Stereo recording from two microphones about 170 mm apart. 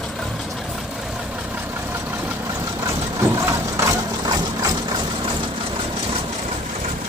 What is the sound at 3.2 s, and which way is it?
Engine, 15° right (ahead or behind).